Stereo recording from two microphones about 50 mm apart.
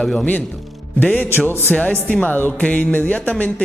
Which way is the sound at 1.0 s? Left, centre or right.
Left.